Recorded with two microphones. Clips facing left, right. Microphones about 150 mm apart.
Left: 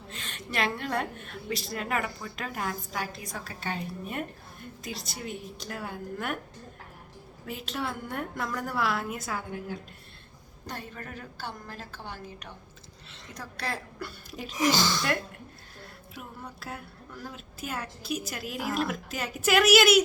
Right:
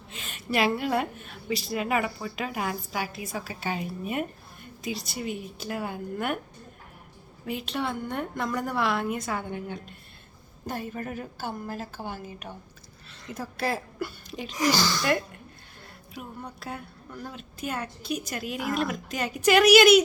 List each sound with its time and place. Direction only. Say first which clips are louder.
0.1 s a woman's voice: right 7 dB; 5° right (ahead or behind)
7.4 s a woman's voice: right 4 dB; centre (ahead or behind)
10.7 s a woman's voice: right 7 dB; 10° right (ahead or behind)
14.3 s a sound: left 1 dB; 5° left (ahead or behind)
14.7 s speech: right 2 dB; 20° left (ahead or behind)
16.1 s music: right 4 dB; centre (ahead or behind)
17.2 s a woman's voice: right 4 dB; 5° left (ahead or behind)